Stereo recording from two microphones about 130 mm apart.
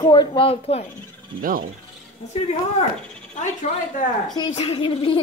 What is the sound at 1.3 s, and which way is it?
Rub, 90° right.